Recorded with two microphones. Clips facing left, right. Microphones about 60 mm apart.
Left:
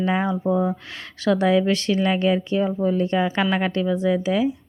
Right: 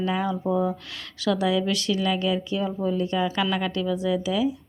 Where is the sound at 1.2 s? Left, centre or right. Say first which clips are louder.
Left 5 dB; left.